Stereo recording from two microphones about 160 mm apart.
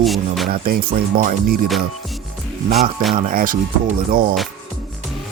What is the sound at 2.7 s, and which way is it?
Speech, 70° right (ahead or behind).